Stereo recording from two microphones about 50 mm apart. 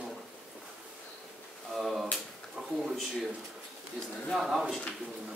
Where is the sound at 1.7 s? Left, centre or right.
Centre.